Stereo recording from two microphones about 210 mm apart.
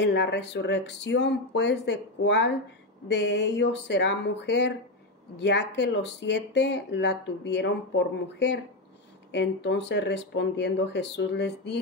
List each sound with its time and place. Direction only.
0.0 s speech: 55° left (ahead or behind)